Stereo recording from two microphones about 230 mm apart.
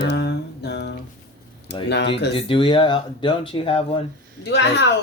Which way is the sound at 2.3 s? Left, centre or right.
Left.